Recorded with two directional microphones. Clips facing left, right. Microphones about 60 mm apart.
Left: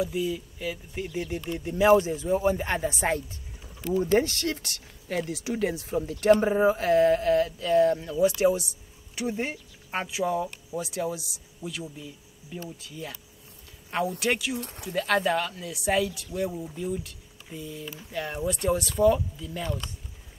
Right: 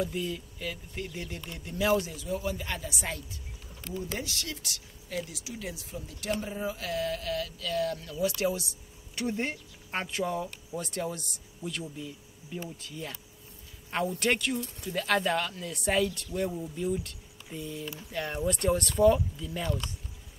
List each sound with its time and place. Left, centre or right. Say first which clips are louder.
0.0 s speech: left 4 dB; centre; by 8.6 s left
9.1 s speech: left 2 dB; centre